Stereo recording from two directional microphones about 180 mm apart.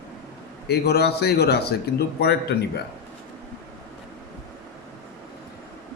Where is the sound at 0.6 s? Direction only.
65° left (ahead or behind).